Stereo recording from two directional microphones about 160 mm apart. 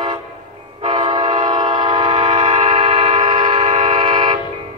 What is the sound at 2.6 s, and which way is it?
Vehicle, 35° right (ahead or behind).